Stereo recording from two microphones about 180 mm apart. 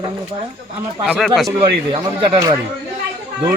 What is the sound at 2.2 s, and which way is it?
Speech, 30° right (ahead or behind).